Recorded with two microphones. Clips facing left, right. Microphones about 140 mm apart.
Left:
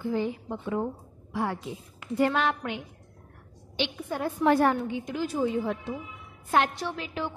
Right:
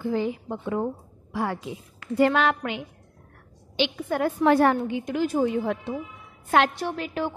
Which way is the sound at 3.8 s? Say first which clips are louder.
Right 6 dB; 80° right.